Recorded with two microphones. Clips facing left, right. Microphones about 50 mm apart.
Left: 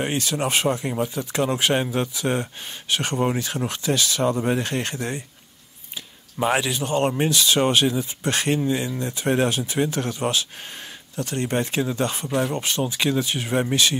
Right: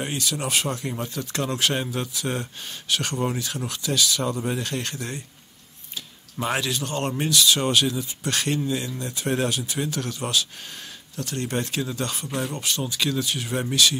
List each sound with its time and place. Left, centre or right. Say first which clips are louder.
0.0 s speech: left 4 dB; left
0.7 s speech: left 6 dB; centre
6.4 s speech: left 4 dB; centre